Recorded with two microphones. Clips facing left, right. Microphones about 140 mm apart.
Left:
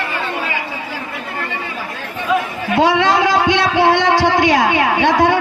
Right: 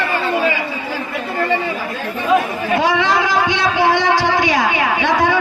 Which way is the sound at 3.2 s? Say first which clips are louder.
Left 2 dB; 60° left (ahead or behind).